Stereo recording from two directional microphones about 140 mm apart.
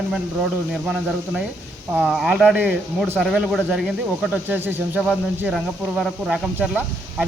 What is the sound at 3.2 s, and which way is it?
Speech, centre (ahead or behind).